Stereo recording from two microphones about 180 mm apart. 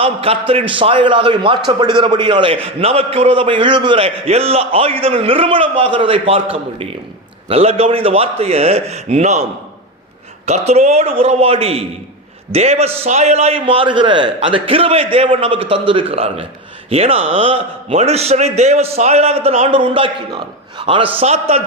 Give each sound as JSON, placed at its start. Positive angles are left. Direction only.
{"t": 0.0, "sound": "a man's voice", "side_deg": -30}
{"t": 10.4, "sound": "a man's voice", "side_deg": -35}